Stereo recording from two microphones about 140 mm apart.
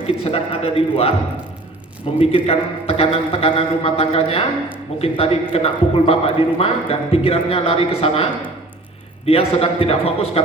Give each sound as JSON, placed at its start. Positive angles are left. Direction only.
{"t": 0.3, "sound": "a man's voice", "side_deg": 45}
{"t": 2.1, "sound": "a man's voice", "side_deg": 45}